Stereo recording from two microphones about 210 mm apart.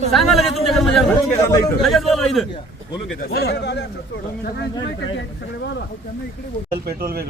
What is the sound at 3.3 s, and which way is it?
Speech, 50° left (ahead or behind).